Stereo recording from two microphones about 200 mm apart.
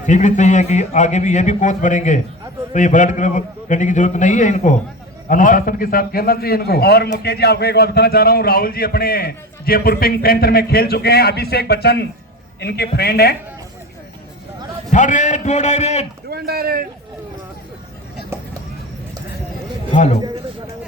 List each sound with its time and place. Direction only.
0.0 s a man's voice: 40° left (ahead or behind)
14.9 s a man's voice: 40° left (ahead or behind)
16.3 s speech: 50° right (ahead or behind)
18.3 s a sound: 10° right (ahead or behind)